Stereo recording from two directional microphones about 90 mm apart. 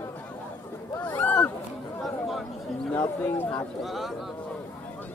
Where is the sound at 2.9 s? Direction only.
15° left (ahead or behind).